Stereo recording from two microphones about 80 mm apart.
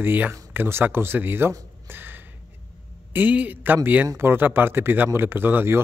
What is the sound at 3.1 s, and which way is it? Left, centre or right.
Speech, centre.